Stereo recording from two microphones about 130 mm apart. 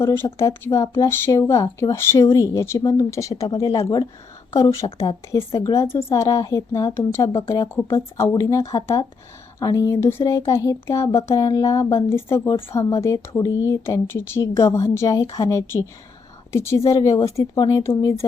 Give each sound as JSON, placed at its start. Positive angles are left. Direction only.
{"t": 0.0, "sound": "a woman's voice", "side_deg": 20}